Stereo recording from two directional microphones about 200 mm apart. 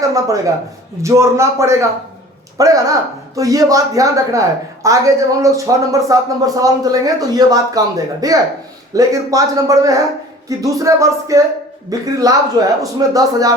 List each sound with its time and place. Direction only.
0.1 s speech: 15° right (ahead or behind)